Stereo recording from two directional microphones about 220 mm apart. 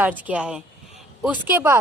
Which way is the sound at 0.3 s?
5° right (ahead or behind).